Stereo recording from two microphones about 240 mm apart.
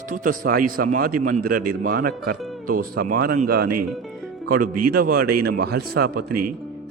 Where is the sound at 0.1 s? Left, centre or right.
Right.